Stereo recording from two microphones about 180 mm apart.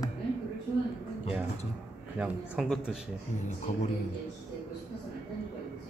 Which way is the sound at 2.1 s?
5° right (ahead or behind).